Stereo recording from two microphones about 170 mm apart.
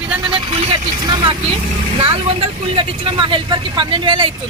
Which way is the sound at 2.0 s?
35° right (ahead or behind).